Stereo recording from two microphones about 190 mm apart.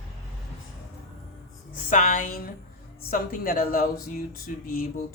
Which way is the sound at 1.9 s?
45° left (ahead or behind).